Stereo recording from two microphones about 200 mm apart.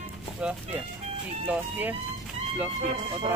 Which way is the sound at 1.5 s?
10° right (ahead or behind).